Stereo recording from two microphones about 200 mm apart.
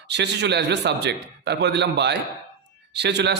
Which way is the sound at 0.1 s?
60° right (ahead or behind).